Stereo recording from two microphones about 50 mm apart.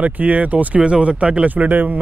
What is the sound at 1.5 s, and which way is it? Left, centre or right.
Speech, right.